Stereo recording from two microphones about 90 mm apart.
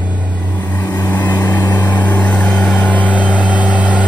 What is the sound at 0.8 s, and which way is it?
Vehicle, 45° left (ahead or behind).